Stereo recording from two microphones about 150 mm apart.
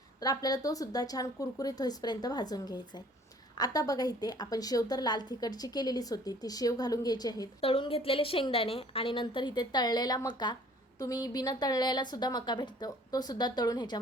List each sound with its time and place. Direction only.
0.2 s a woman's voice: 25° left (ahead or behind)
7.6 s a woman's voice: 40° left (ahead or behind)